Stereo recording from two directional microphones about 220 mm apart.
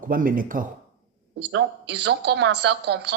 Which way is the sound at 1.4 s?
50° right (ahead or behind).